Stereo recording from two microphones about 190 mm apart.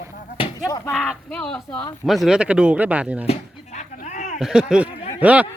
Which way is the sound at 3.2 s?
35° left (ahead or behind).